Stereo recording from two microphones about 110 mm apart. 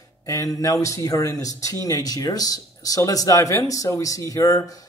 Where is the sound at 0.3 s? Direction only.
30° left (ahead or behind).